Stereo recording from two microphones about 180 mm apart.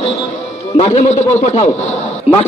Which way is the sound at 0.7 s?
35° left (ahead or behind).